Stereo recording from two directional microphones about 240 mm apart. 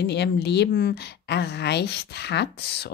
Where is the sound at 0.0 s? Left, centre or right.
Left.